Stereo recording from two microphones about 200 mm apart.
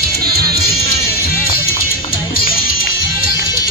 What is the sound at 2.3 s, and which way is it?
Music, 45° left (ahead or behind).